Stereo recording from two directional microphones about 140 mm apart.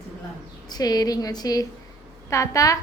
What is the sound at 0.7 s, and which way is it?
A woman's voice, 30° left (ahead or behind).